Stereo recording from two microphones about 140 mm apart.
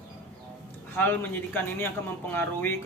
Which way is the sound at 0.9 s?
15° left (ahead or behind).